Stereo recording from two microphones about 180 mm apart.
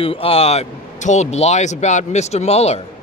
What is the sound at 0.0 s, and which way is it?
Speech, 30° left (ahead or behind).